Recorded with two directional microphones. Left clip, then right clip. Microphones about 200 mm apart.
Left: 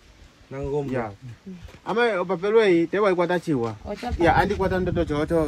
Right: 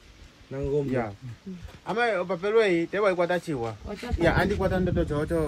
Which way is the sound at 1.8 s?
30° left (ahead or behind).